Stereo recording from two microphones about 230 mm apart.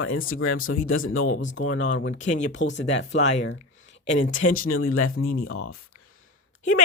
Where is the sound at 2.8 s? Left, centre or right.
Left.